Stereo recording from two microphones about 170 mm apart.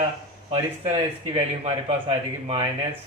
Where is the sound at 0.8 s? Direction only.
35° right (ahead or behind).